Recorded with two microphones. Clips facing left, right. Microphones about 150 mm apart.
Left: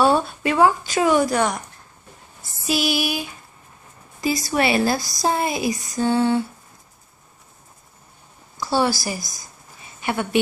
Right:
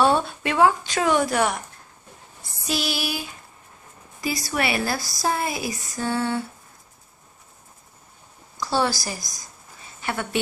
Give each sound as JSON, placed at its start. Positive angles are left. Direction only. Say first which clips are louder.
{"t": 0.0, "sound": "a woman's voice", "louder": "left 2 dB", "side_deg": 0}
{"t": 2.6, "sound": "female singing", "louder": "left 5 dB", "side_deg": 10}
{"t": 4.2, "sound": "speech", "louder": "left 5 dB", "side_deg": 25}
{"t": 8.5, "sound": "a sound", "louder": "left 3 dB", "side_deg": 10}
{"t": 10.0, "sound": "female singing", "louder": "left 5 dB", "side_deg": 15}